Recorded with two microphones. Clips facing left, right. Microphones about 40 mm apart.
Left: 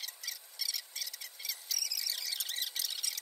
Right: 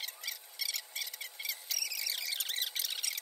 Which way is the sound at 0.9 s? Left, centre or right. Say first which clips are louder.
Right 3 dB; right.